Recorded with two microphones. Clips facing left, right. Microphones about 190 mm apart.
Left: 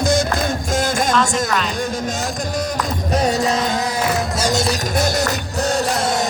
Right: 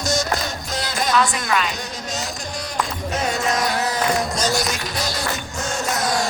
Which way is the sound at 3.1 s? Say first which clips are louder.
Left 6 dB; 35° left (ahead or behind).